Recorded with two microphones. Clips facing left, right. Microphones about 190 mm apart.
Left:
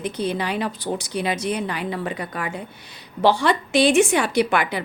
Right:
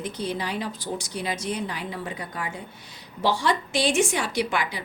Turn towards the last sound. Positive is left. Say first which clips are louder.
# left 6 dB
turn(degrees=60)  # may be behind; listen again after turning